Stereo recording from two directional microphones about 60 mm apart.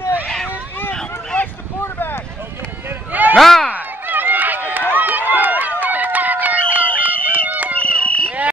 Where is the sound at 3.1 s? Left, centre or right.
Right.